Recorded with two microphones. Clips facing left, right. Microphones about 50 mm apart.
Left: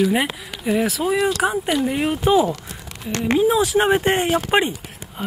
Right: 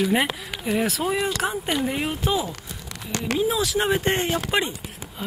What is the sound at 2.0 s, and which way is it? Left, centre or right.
Speech, centre.